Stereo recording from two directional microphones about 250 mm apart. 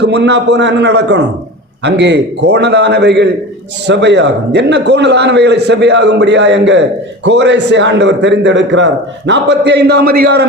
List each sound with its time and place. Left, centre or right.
0.0 s a man's voice: right